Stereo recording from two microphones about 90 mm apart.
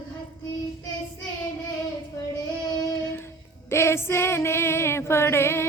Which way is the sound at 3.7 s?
30° left (ahead or behind).